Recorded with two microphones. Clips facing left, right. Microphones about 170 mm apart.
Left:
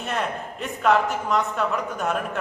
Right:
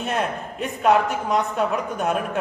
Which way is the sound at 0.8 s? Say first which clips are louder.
Right 2 dB; 20° right (ahead or behind).